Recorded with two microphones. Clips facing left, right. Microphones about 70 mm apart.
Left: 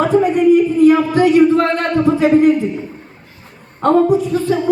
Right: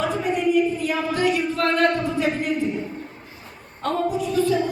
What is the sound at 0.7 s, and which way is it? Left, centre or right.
Music, left.